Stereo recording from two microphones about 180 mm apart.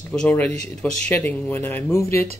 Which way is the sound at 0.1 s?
5° left (ahead or behind).